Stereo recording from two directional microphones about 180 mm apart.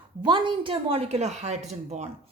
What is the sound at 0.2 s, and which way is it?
Speech, 25° right (ahead or behind).